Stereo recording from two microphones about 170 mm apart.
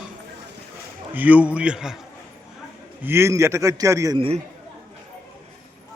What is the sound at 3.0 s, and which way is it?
A man's voice, 15° right (ahead or behind).